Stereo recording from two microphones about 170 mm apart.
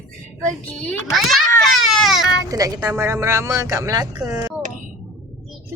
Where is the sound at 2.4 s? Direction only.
20° right (ahead or behind).